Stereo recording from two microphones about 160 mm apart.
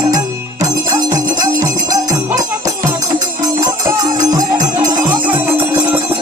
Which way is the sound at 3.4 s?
20° right (ahead or behind).